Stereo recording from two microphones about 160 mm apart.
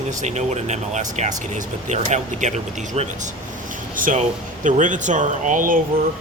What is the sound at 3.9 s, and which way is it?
Speech, 55° right (ahead or behind).